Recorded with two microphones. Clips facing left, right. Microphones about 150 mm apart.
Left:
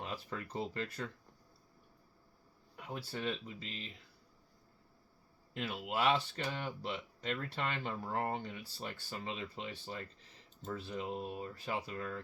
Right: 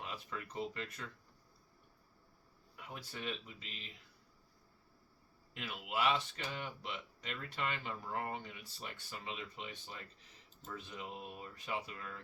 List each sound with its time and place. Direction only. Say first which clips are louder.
0.0 s speech: left 3 dB; 35° left (ahead or behind)
2.7 s speech: left 6 dB; 35° left (ahead or behind)
5.5 s speech: left 3 dB; 35° left (ahead or behind)